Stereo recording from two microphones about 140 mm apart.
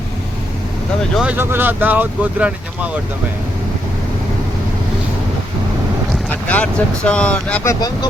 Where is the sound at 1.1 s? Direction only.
10° right (ahead or behind).